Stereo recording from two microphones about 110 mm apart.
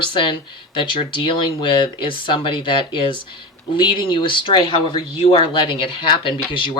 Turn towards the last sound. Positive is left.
turn(degrees=50)  # may be behind; listen again after turning